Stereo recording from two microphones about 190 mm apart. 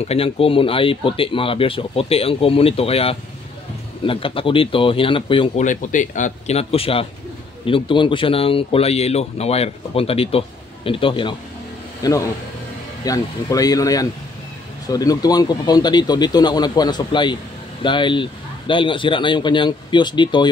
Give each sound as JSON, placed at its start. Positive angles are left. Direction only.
{"t": 0.0, "sound": "speech", "side_deg": 30}
{"t": 5.6, "sound": "a man's voice", "side_deg": 40}